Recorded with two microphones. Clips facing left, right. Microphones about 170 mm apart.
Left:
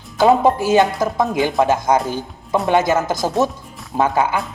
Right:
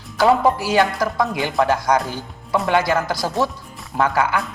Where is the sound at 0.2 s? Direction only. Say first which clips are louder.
Left 2 dB; 20° left (ahead or behind).